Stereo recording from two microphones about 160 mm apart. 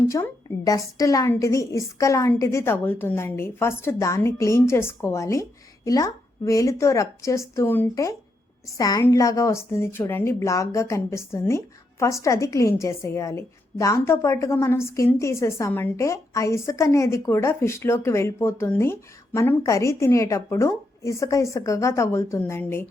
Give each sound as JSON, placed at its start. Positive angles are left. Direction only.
{"t": 0.1, "sound": "a woman's voice", "side_deg": 20}